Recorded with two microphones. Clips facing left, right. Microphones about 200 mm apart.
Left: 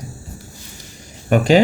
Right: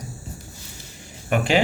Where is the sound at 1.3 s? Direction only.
40° left (ahead or behind).